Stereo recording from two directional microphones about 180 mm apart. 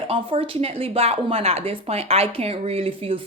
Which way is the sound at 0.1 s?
30° right (ahead or behind).